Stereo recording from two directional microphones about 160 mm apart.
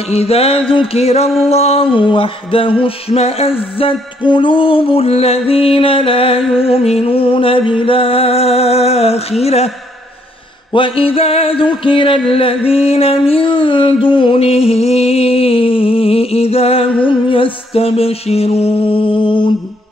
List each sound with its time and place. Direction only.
0.1 s music: 40° left (ahead or behind)
10.7 s music: 35° left (ahead or behind)